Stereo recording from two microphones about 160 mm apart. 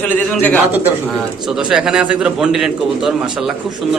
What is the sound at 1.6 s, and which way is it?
A man's voice, 5° right (ahead or behind).